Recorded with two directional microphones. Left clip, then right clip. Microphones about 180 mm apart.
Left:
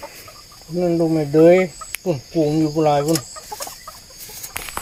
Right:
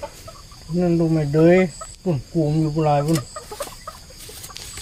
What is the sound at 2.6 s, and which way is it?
Speech, 70° left (ahead or behind).